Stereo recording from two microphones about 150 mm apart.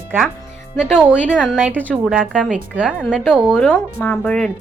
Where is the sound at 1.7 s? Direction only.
10° left (ahead or behind).